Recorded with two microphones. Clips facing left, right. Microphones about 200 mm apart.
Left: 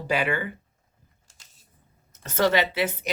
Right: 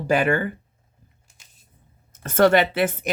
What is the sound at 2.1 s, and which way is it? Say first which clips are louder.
Speech: right 6 dB; 50° right (ahead or behind).